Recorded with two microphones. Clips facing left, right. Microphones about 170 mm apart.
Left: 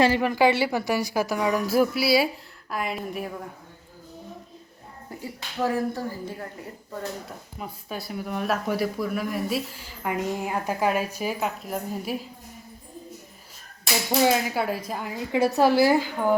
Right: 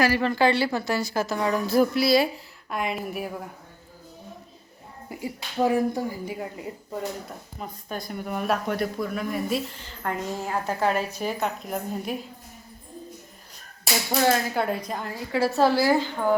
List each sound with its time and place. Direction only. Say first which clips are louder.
0.0 s a woman's voice: left 1 dB; 20° left (ahead or behind); by 3.5 s 5° right (ahead or behind)
5.5 s speech: right 3 dB; 15° right (ahead or behind)
7.3 s speech: even; 5° left (ahead or behind)
14.1 s speech: left 1 dB; 10° left (ahead or behind)
15.1 s a woman's voice: left 2 dB; 20° left (ahead or behind)